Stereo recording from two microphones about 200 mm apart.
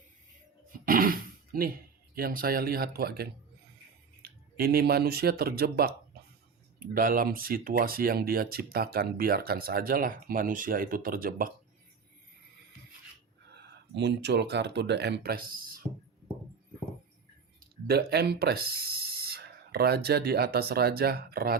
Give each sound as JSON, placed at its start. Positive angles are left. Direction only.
{"t": 0.9, "sound": "a sound", "side_deg": -45}
{"t": 2.1, "sound": "speech", "side_deg": -45}
{"t": 13.9, "sound": "speech", "side_deg": -55}
{"t": 17.8, "sound": "speech", "side_deg": -50}